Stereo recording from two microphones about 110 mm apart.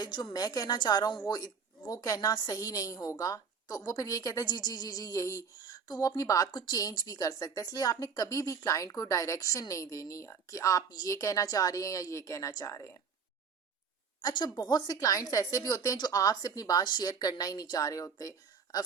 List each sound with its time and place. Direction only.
0.0 s a woman's voice: 45° left (ahead or behind)
14.2 s a woman's voice: 40° left (ahead or behind)